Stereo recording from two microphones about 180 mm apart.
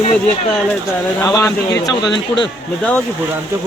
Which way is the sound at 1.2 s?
20° left (ahead or behind).